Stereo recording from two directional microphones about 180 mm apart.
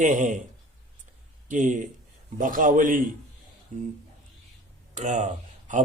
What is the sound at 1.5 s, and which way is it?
Speech, 45° right (ahead or behind).